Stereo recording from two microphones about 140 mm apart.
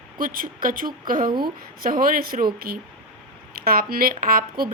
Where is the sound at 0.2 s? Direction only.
90° right.